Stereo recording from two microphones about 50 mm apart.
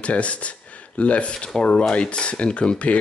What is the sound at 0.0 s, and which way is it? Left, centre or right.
Speech, left.